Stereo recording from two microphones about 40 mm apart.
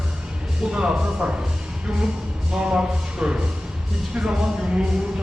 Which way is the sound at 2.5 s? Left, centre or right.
Centre.